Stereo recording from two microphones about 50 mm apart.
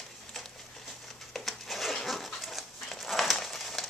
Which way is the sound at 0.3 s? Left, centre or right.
Centre.